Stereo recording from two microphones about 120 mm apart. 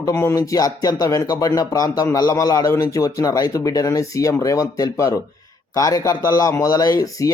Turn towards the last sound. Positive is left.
turn(degrees=30)  # may be behind; listen again after turning